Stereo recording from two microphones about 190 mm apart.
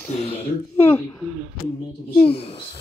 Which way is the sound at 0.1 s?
35° left (ahead or behind).